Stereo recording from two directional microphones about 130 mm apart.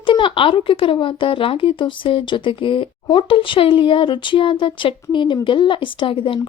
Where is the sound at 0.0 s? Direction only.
40° left (ahead or behind).